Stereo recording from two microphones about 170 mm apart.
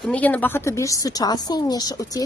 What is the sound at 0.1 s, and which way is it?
A woman's voice, 10° left (ahead or behind).